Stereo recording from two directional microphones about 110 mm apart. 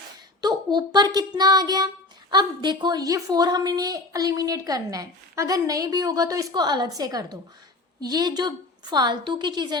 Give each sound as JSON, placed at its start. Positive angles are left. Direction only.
{"t": 0.4, "sound": "a woman's voice", "side_deg": -40}